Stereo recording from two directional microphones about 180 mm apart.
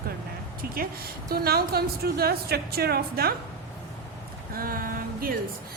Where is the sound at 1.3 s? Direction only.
60° right (ahead or behind).